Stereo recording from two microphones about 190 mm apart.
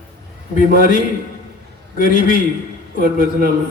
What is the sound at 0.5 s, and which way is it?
A man's voice, 45° left (ahead or behind).